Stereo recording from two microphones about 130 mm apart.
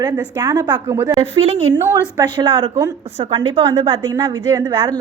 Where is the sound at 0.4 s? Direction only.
25° right (ahead or behind).